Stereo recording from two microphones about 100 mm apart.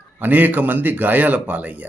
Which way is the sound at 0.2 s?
20° right (ahead or behind).